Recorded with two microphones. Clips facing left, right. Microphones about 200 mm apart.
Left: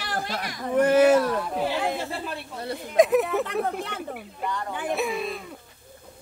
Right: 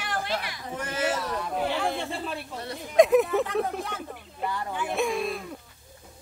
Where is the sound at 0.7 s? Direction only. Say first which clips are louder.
Left 12 dB; 60° left (ahead or behind).